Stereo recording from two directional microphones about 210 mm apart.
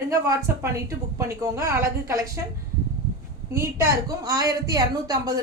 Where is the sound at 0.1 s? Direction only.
15° right (ahead or behind).